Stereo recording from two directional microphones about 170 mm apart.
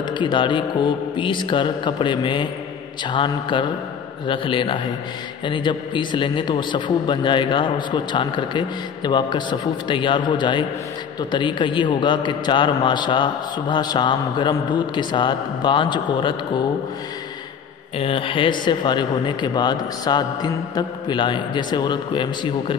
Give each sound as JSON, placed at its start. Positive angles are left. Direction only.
{"t": 0.2, "sound": "a man's voice", "side_deg": 30}
{"t": 17.9, "sound": "a man's voice", "side_deg": 35}